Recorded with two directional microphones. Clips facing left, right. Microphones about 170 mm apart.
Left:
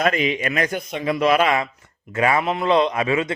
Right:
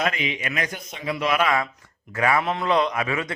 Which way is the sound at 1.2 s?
35° left (ahead or behind).